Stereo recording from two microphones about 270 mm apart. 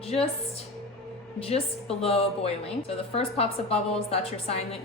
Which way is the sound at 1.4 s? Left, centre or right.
Left.